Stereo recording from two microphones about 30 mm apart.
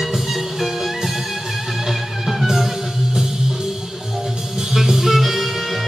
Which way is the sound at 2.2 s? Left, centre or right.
Centre.